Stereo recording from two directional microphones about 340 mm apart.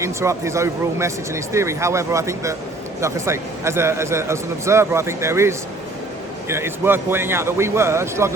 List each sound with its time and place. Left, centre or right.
0.0 s a man's voice: centre